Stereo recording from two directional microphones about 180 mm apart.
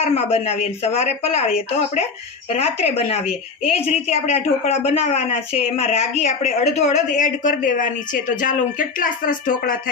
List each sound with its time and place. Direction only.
0.1 s a woman's voice: 35° left (ahead or behind); by 9.9 s 50° left (ahead or behind)